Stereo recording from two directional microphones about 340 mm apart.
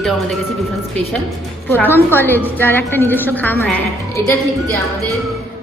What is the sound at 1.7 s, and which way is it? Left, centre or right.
A woman's voice, centre.